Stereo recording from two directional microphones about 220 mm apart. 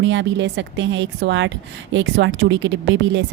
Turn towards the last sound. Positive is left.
turn(degrees=-55)  # may be behind; listen again after turning